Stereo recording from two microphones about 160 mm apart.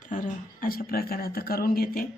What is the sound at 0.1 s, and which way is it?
Speech, 60° left (ahead or behind).